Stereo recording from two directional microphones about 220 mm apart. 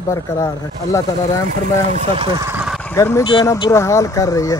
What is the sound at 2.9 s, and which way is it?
Speech, 10° left (ahead or behind).